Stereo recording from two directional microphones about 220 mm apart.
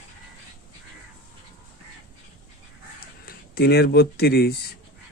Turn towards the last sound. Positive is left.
turn(degrees=45)  # may be behind; listen again after turning